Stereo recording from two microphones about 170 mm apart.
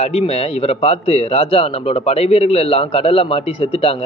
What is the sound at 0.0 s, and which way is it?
Speech, 35° left (ahead or behind).